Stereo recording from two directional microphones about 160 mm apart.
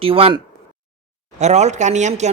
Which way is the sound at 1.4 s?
45° right (ahead or behind).